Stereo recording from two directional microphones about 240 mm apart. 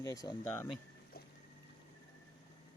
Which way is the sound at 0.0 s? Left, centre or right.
Centre.